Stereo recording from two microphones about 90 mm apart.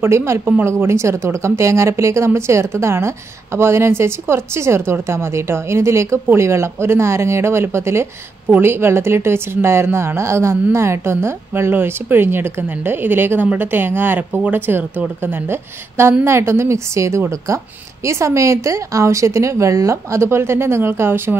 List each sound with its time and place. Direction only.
0.0 s a woman's voice: 30° right (ahead or behind)